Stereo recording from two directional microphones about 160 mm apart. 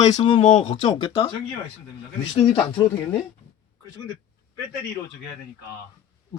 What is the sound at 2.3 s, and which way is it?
Speech, 30° left (ahead or behind).